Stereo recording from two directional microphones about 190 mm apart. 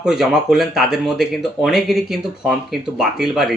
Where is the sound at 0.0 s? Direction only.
5° right (ahead or behind).